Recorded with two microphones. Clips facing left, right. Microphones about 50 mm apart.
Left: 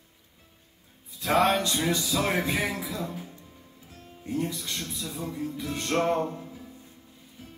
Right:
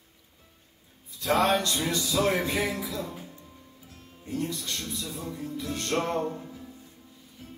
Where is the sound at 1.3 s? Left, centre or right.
Left.